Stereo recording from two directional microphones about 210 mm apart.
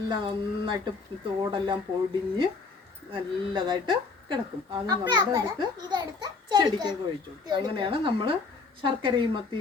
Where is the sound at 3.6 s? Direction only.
20° right (ahead or behind).